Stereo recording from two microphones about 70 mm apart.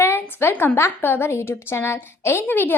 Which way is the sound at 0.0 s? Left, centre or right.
Left.